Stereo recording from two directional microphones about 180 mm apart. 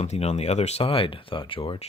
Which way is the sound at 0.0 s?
35° left (ahead or behind).